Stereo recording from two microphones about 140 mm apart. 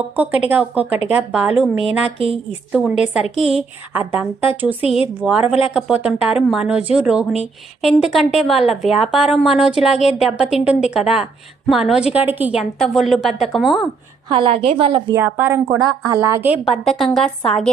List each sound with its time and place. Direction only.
0.2 s a woman's voice: 10° right (ahead or behind)
2.1 s a woman's voice: 40° right (ahead or behind)
2.7 s a woman's voice: 5° right (ahead or behind)
12.8 s a woman's voice: centre (ahead or behind)
14.3 s a woman's voice: 40° right (ahead or behind)
15.1 s a woman's voice: 15° right (ahead or behind)
16.8 s a woman's voice: 5° left (ahead or behind)